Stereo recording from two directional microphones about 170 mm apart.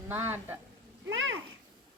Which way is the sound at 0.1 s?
15° right (ahead or behind).